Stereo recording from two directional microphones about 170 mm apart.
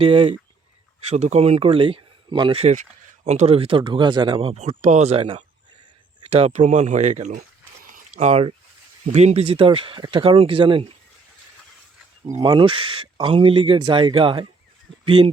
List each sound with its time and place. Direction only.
0.0 s speech: 35° right (ahead or behind)
7.9 s a sound: 50° right (ahead or behind)
9.1 s speech: 40° right (ahead or behind)
12.2 s speech: 20° right (ahead or behind)